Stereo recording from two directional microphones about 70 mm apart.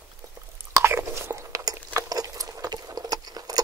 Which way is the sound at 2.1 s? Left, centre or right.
Right.